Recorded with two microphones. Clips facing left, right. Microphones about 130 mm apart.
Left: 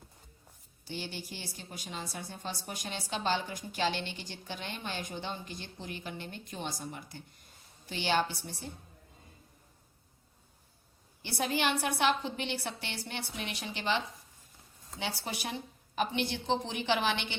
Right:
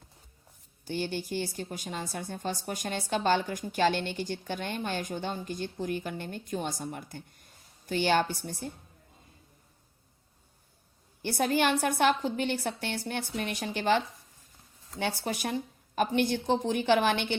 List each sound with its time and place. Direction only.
0.9 s a woman's voice: 50° right (ahead or behind)
11.2 s a woman's voice: 50° right (ahead or behind)